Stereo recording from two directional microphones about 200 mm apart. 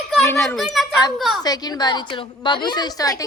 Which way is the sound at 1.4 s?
20° left (ahead or behind).